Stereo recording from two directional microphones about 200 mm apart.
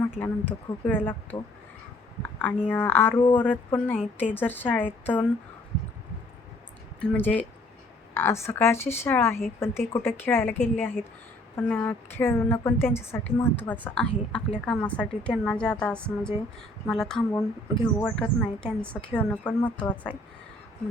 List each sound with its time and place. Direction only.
0.2 s a woman's voice: 10° left (ahead or behind)
3.2 s a woman's voice: 25° left (ahead or behind)
3.4 s a woman's voice: 10° left (ahead or behind)
7.0 s a woman's voice: 5° left (ahead or behind)